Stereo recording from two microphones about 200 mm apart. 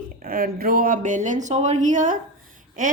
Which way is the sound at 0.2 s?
45° right (ahead or behind).